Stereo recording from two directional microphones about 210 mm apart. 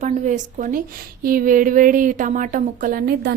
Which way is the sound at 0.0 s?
35° right (ahead or behind).